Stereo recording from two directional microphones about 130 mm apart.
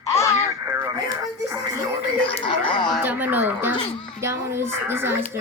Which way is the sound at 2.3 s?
40° left (ahead or behind).